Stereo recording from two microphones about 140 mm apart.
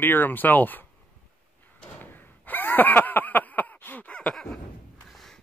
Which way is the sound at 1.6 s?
15° left (ahead or behind).